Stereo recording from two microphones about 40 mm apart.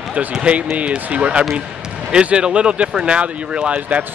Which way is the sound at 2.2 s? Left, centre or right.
Right.